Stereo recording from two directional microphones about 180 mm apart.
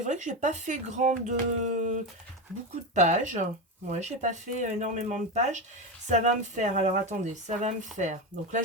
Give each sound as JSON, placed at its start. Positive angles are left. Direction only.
{"t": 0.0, "sound": "speech", "side_deg": -40}